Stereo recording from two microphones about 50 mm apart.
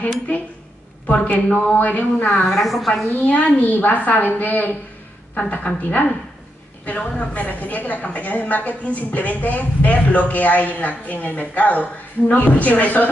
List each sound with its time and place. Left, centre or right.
1.0 s a woman's voice: left
2.4 s a woman's voice: centre
3.1 s a woman's voice: left
5.8 s a woman's voice: left